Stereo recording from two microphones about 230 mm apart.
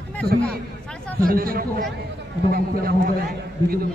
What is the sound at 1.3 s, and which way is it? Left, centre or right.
A man's voice, right.